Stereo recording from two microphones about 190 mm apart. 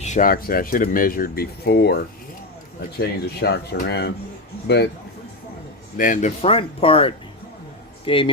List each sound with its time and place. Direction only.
0.0 s speech: 40° left (ahead or behind); by 2.0 s 60° left (ahead or behind)
3.0 s speech: 60° left (ahead or behind)
6.0 s speech: 45° left (ahead or behind)
6.4 s speech: 30° left (ahead or behind)